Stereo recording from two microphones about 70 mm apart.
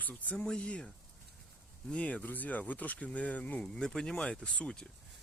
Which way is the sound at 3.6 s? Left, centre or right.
Centre.